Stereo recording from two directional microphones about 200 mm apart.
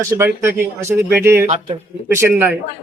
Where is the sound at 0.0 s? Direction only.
10° right (ahead or behind).